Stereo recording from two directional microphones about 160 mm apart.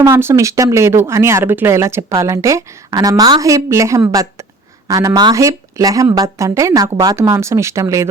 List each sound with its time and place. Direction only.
0.0 s a woman's voice: 15° right (ahead or behind)